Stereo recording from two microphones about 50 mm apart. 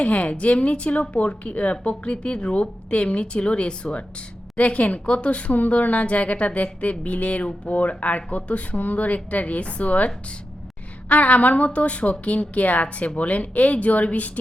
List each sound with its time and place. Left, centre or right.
0.0 s speech: left
11.1 s speech: left